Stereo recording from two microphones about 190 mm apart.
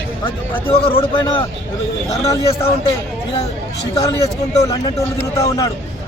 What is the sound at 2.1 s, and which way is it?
Speech, 15° left (ahead or behind).